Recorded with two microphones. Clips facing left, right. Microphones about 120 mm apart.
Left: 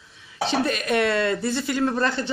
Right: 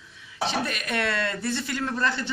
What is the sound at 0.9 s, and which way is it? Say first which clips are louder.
Speech: left 6 dB; 20° left (ahead or behind).